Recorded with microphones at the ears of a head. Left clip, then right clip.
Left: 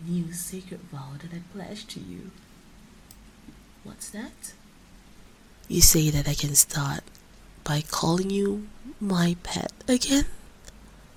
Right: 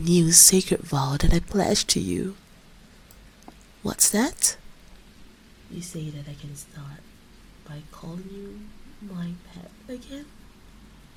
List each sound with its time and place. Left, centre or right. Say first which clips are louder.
0.0 s speech: right 18 dB; right
3.8 s speech: right 17 dB; right
5.6 s speech: left 17 dB; left